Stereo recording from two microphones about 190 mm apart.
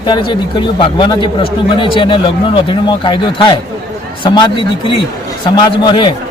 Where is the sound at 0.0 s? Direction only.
25° left (ahead or behind).